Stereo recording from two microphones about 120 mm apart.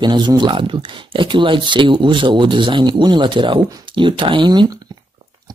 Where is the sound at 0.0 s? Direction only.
40° right (ahead or behind).